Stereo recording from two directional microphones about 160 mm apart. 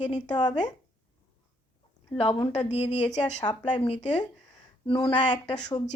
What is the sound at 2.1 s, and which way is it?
A woman's voice, 35° left (ahead or behind).